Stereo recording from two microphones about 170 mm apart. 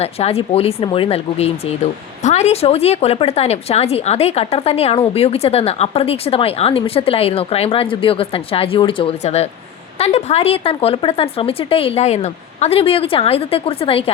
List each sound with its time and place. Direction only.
0.0 s a woman's voice: 35° left (ahead or behind)